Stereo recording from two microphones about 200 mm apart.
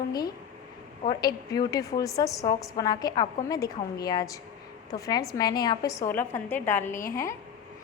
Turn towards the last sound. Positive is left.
turn(degrees=15)  # may be behind; listen again after turning